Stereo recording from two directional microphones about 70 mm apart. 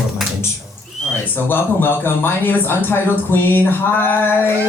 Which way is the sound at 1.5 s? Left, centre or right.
Left.